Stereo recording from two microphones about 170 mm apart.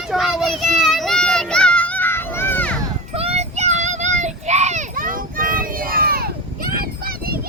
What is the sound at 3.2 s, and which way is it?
Child singing, 35° right (ahead or behind).